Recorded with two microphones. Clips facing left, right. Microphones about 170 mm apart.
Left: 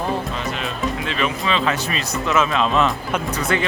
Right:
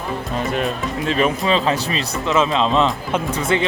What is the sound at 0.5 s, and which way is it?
Speech, 40° right (ahead or behind).